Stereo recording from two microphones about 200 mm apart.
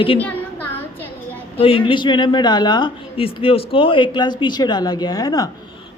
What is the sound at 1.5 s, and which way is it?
A man's voice, 25° left (ahead or behind).